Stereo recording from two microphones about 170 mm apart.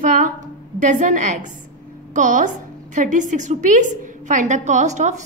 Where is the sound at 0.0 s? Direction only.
50° right (ahead or behind).